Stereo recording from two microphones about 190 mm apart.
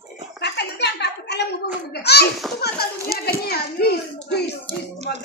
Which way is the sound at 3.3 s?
55° left (ahead or behind).